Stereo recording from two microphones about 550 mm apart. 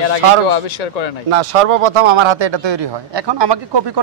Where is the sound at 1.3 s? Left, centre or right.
Right.